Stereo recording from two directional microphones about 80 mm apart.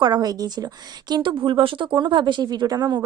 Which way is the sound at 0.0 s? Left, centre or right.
Right.